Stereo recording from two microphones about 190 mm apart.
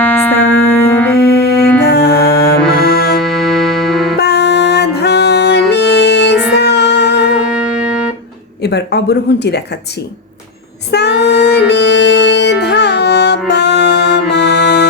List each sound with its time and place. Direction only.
0.0 s music: 10° left (ahead or behind)
1.1 s music: 55° left (ahead or behind)
3.2 s music: centre (ahead or behind)
4.2 s music: 60° left (ahead or behind)
7.3 s music: 5° right (ahead or behind)
8.6 s speech: 60° left (ahead or behind)
10.9 s music: 60° left (ahead or behind)